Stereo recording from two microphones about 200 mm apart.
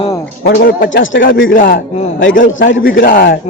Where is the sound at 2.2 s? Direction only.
70° left (ahead or behind).